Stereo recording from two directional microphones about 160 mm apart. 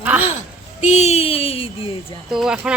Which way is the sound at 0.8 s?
45° left (ahead or behind).